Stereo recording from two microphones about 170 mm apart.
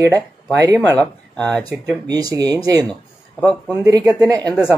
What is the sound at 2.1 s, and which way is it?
Speech, 20° right (ahead or behind).